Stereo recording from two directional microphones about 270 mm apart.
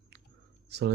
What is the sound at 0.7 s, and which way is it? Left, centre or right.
Speech, right.